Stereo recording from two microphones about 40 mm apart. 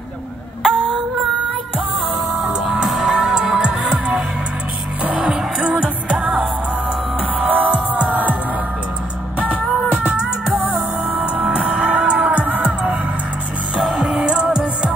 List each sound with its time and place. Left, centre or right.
3.0 s music: centre
5.6 s music: right
7.3 s music: right
10.7 s music: right
13.7 s music: centre
14.3 s music: right